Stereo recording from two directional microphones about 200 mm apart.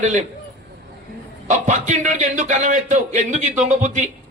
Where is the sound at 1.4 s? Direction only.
35° right (ahead or behind).